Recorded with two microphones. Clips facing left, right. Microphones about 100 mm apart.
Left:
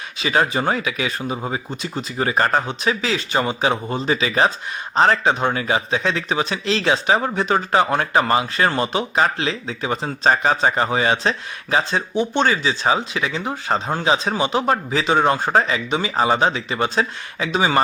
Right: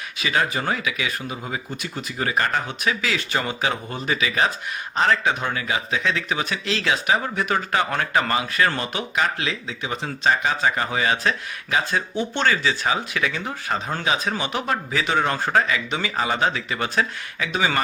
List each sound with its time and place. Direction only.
0.2 s speech: 30° left (ahead or behind)